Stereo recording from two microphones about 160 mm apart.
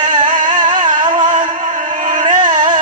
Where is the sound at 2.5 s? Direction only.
50° right (ahead or behind).